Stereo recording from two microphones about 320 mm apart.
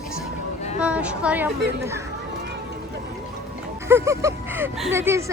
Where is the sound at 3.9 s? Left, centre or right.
Centre.